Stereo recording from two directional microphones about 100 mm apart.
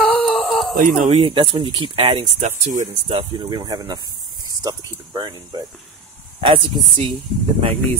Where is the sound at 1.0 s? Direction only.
80° right.